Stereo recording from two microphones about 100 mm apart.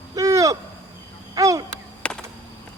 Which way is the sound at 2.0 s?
10° left (ahead or behind).